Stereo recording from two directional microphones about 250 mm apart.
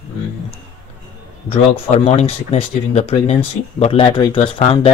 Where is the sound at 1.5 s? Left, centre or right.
Left.